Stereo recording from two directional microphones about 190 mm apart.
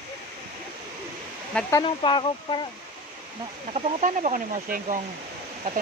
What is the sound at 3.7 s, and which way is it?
Speech, 40° right (ahead or behind).